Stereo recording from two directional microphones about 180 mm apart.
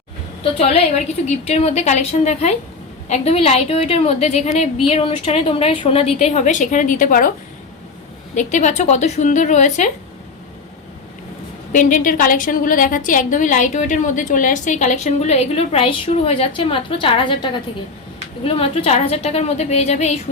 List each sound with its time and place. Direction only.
0.5 s speech: 35° left (ahead or behind)
8.4 s speech: 40° left (ahead or behind)
11.7 s a woman's voice: 45° left (ahead or behind)